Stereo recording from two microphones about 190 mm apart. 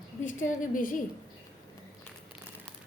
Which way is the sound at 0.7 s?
45° left (ahead or behind).